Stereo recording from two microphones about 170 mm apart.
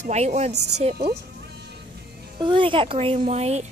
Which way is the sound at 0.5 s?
80° right.